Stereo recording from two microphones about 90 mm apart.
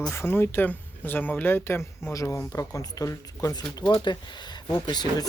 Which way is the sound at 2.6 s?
35° left (ahead or behind).